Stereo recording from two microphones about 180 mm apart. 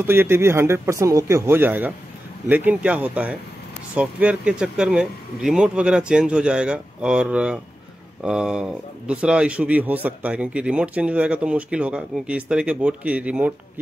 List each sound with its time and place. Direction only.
0.0 s speech: 15° right (ahead or behind)